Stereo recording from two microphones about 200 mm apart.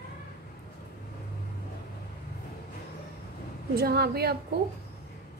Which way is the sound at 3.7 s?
50° right (ahead or behind).